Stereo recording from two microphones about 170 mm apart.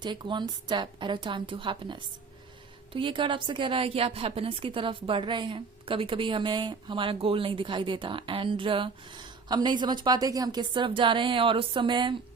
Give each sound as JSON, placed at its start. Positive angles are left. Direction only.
{"t": 0.0, "sound": "a woman's voice", "side_deg": -25}